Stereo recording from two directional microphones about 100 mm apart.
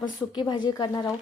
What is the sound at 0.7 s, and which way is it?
Speech, 35° left (ahead or behind).